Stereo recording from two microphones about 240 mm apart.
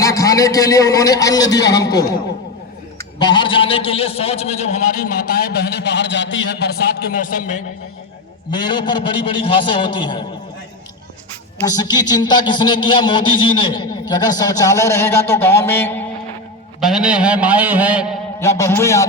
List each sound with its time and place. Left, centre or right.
0.0 s a man's voice: centre
3.2 s a man's voice: centre
8.4 s a man's voice: centre
11.6 s a man's voice: centre
16.8 s a sound: centre
18.3 s a man's voice: centre